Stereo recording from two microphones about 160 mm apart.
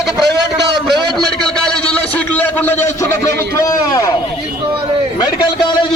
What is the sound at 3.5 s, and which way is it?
Speech, 20° left (ahead or behind).